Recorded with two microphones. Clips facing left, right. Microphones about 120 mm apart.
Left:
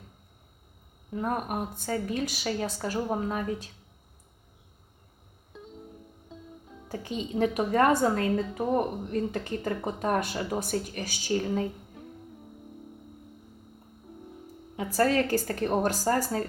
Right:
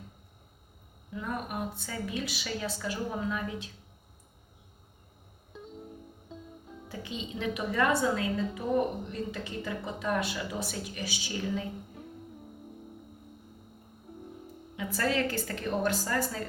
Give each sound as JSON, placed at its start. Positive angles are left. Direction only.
{"t": 1.1, "sound": "a woman's voice", "side_deg": 45}
{"t": 5.5, "sound": "music", "side_deg": 0}
{"t": 6.8, "sound": "a woman's voice", "side_deg": 45}
{"t": 14.9, "sound": "a woman's voice", "side_deg": 40}